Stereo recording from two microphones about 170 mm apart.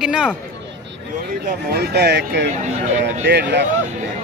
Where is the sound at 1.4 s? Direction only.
70° right (ahead or behind); by 2.4 s 85° right.